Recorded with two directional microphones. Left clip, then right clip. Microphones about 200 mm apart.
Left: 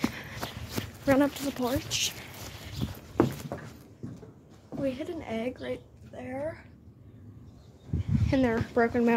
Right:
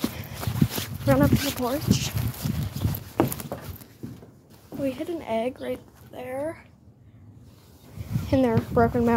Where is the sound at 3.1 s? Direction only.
45° right (ahead or behind).